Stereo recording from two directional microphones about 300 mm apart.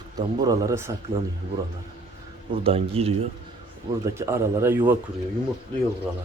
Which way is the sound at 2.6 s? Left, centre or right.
Centre.